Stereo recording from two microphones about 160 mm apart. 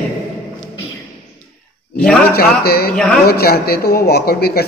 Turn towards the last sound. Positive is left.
turn(degrees=80)